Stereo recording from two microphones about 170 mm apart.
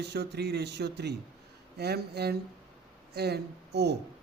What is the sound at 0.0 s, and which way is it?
Speech, 75° right (ahead or behind).